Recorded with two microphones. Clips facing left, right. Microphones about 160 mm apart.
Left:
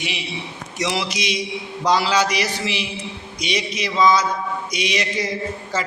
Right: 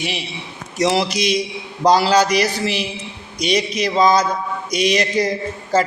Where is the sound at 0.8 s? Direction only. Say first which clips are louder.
Right 7 dB; 35° right (ahead or behind).